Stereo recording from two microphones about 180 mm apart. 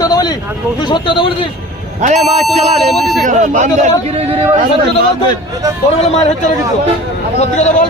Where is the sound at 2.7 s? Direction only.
Centre (ahead or behind).